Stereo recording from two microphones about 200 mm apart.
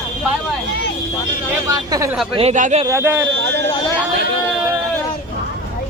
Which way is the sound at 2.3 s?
35° right (ahead or behind).